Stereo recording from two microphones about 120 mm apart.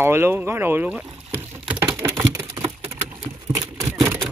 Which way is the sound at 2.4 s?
30° right (ahead or behind).